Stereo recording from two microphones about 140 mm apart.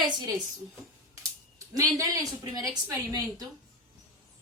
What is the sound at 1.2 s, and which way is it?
Speech, 20° right (ahead or behind).